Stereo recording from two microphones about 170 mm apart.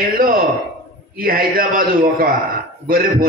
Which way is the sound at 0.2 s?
55° right (ahead or behind).